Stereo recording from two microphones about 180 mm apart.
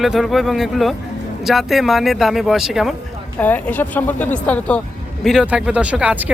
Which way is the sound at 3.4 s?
10° left (ahead or behind).